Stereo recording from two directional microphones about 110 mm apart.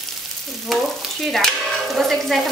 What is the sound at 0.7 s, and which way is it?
Stir, centre (ahead or behind).